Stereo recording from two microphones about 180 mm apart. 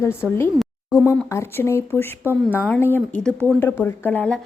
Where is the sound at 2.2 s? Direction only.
10° right (ahead or behind).